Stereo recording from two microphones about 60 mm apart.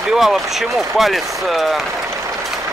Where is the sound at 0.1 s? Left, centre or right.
Centre.